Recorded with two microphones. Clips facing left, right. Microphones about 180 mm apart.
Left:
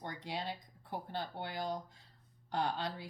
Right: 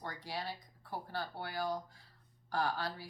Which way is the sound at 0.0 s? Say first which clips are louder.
Left 1 dB; 20° left (ahead or behind).